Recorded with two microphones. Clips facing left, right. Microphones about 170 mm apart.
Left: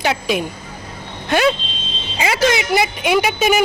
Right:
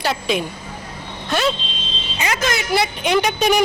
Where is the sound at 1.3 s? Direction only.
65° left (ahead or behind).